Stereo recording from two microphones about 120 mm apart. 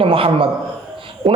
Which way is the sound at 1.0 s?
45° right (ahead or behind).